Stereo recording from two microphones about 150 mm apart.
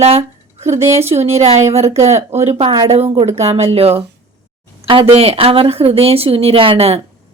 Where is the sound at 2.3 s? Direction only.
45° right (ahead or behind).